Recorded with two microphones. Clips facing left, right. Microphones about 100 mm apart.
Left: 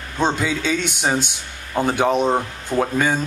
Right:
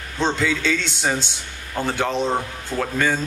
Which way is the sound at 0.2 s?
15° left (ahead or behind).